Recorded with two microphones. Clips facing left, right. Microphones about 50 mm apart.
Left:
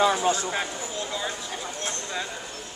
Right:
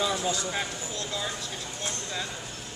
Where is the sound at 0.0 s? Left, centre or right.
Left.